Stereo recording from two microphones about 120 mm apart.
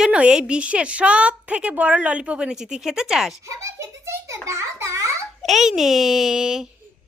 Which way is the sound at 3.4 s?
25° right (ahead or behind).